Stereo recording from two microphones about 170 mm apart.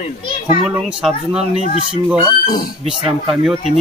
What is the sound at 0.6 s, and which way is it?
Speech, 5° right (ahead or behind).